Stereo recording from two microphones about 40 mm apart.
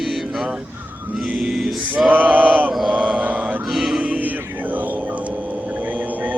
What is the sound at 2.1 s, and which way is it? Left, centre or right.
Male singing, right.